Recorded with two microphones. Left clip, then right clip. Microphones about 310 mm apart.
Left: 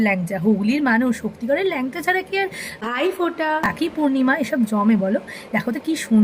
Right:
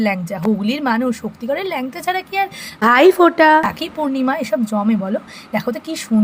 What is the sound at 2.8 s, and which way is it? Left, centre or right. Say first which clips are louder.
A woman's voice: right 12 dB; right.